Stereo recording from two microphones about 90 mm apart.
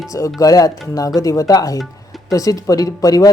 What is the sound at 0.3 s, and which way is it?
Speech, 40° left (ahead or behind).